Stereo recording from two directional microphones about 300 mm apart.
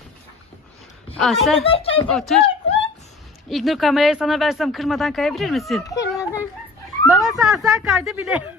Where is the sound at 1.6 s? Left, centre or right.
Centre.